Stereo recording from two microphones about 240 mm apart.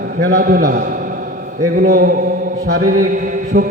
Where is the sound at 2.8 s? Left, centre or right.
Right.